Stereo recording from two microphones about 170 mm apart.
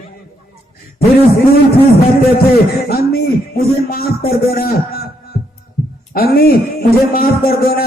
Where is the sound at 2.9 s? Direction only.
65° left (ahead or behind).